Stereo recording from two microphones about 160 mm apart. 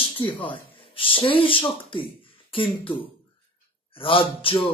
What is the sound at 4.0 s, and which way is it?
Speech, 35° left (ahead or behind).